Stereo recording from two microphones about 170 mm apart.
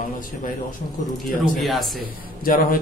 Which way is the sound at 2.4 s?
55° left (ahead or behind).